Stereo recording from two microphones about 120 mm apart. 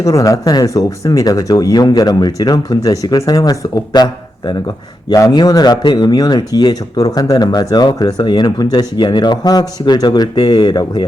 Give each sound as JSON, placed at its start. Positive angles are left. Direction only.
{"t": 0.0, "sound": "a man's voice", "side_deg": 30}